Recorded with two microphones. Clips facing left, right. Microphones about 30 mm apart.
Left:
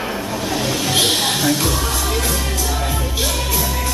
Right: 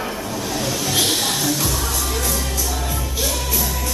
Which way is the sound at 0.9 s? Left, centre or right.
Left.